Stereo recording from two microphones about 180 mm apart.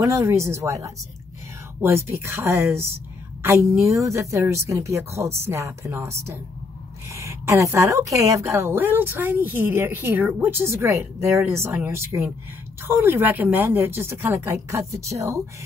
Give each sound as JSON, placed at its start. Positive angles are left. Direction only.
{"t": 0.0, "sound": "a woman's voice", "side_deg": -15}